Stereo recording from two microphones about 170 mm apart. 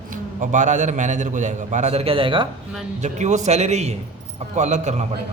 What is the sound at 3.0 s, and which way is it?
A man's voice, 45° right (ahead or behind).